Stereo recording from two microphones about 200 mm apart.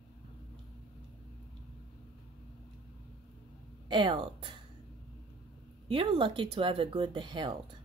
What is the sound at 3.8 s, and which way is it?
Speech, 25° right (ahead or behind).